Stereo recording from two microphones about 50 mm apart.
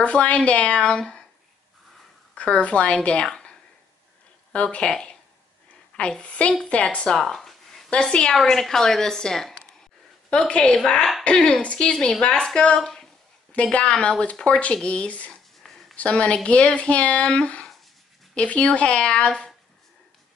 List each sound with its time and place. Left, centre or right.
0.0 s a woman's voice: left
2.3 s a woman's voice: left
7.3 s a sound: centre
7.9 s a woman's voice: centre
13.5 s a woman's voice: left